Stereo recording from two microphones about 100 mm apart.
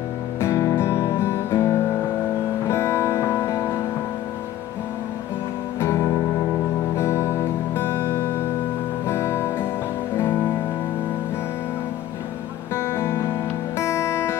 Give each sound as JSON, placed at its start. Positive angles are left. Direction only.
{"t": 0.4, "sound": "music", "side_deg": 30}
{"t": 5.8, "sound": "music", "side_deg": 25}
{"t": 12.7, "sound": "music", "side_deg": 25}